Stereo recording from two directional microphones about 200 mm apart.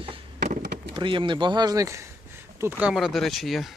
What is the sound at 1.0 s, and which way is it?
Speech, 25° right (ahead or behind).